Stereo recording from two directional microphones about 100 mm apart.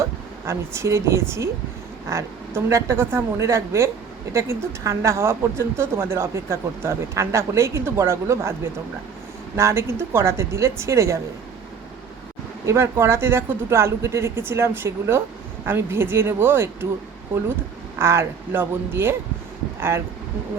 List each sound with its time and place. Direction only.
0.0 s speech: 30° right (ahead or behind)
2.6 s speech: 30° right (ahead or behind)
9.6 s speech: 25° right (ahead or behind)
12.6 s speech: 25° right (ahead or behind)
18.0 s speech: 25° right (ahead or behind)